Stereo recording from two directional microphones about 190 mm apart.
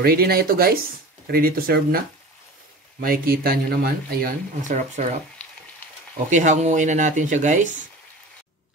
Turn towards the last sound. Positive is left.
turn(degrees=-40)  # may be behind; listen again after turning